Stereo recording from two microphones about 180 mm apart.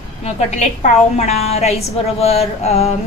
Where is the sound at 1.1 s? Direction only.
35° left (ahead or behind).